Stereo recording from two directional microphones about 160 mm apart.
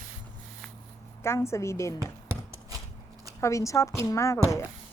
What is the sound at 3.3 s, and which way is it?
Speech, 20° left (ahead or behind).